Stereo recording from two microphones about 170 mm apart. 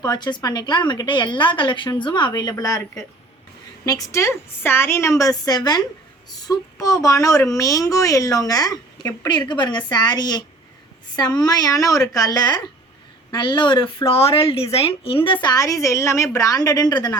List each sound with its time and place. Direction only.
0.0 s speech: 25° left (ahead or behind)
3.8 s speech: 20° left (ahead or behind)